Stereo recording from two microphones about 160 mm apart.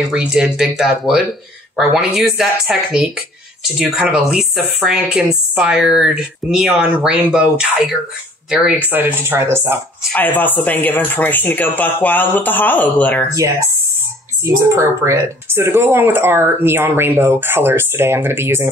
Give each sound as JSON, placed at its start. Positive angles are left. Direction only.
{"t": 0.1, "sound": "speech", "side_deg": -5}
{"t": 10.1, "sound": "speech", "side_deg": 10}
{"t": 13.3, "sound": "speech", "side_deg": -20}